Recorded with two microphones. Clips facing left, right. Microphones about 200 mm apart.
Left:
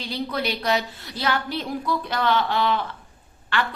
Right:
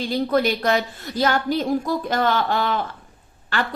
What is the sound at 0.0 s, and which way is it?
A woman's voice, 45° right (ahead or behind).